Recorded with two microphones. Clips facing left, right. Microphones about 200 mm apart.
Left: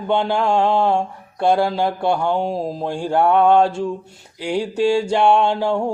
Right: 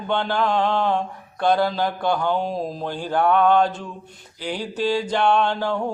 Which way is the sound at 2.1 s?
10° left (ahead or behind).